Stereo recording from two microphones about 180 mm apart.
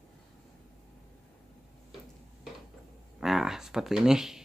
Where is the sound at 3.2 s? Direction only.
Centre (ahead or behind).